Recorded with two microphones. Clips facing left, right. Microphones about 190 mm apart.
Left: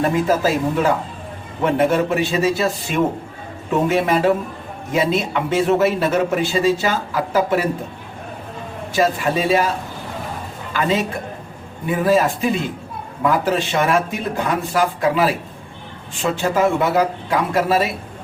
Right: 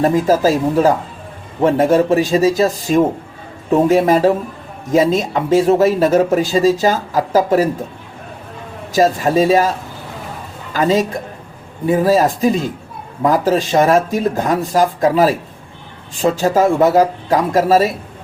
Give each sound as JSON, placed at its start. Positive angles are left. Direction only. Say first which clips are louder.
{"t": 0.0, "sound": "speech", "louder": "right 4 dB", "side_deg": -35}
{"t": 9.0, "sound": "speech", "louder": "right 5 dB", "side_deg": -40}
{"t": 10.8, "sound": "speech", "louder": "right 5 dB", "side_deg": -40}